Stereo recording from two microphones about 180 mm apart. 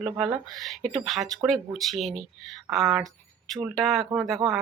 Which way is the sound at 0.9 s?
Centre (ahead or behind).